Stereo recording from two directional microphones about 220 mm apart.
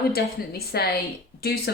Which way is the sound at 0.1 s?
45° left (ahead or behind).